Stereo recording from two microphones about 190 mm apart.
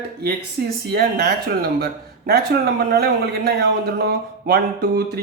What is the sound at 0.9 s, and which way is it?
Speech, 55° right (ahead or behind).